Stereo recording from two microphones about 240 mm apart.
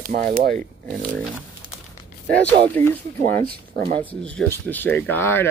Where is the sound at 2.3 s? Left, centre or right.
Centre.